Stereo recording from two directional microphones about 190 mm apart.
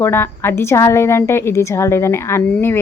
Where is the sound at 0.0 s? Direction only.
10° left (ahead or behind).